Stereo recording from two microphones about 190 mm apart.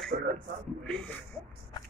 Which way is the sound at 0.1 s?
40° right (ahead or behind).